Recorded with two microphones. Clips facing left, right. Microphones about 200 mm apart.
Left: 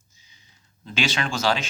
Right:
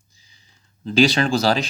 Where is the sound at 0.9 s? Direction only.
35° right (ahead or behind).